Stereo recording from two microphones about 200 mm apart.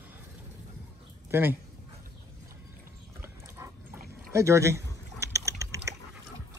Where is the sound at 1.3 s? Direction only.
10° right (ahead or behind).